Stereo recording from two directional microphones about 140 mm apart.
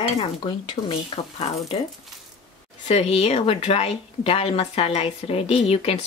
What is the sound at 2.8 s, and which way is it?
A woman's voice, 50° left (ahead or behind).